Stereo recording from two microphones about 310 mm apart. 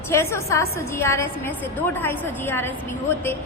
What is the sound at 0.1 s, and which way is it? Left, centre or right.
A woman's voice, centre.